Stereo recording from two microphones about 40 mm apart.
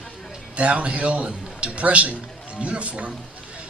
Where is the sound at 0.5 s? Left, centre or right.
Right.